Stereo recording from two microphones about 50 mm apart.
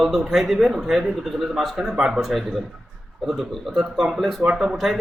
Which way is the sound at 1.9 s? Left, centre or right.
Centre.